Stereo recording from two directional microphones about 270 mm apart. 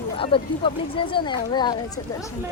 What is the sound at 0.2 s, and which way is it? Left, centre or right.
Speech, centre.